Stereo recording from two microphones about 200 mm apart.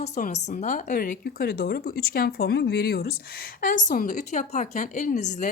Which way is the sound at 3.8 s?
40° left (ahead or behind).